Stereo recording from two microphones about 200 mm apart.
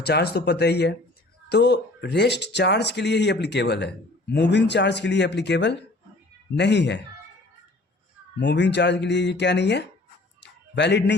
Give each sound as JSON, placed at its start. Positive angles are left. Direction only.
{"t": 0.0, "sound": "speech", "side_deg": 55}
{"t": 8.4, "sound": "speech", "side_deg": 60}
{"t": 10.4, "sound": "a sound", "side_deg": 60}